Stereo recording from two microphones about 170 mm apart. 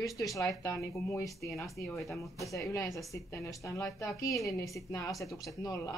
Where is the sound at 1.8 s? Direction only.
70° left (ahead or behind).